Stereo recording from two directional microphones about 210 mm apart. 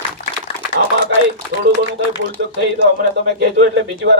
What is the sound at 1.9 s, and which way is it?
A man's voice, 55° right (ahead or behind).